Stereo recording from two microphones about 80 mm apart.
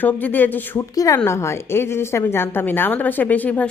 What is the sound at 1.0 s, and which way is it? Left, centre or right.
A woman's voice, left.